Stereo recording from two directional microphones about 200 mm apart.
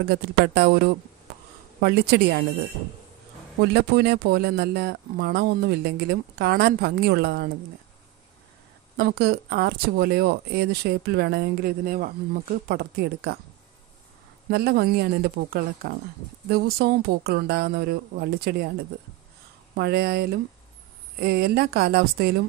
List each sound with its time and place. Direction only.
0.1 s speech: 50° right (ahead or behind)
3.7 s speech: 55° right (ahead or behind)
8.9 s speech: 55° right (ahead or behind)
14.5 s speech: 50° right (ahead or behind)
19.7 s speech: 55° right (ahead or behind)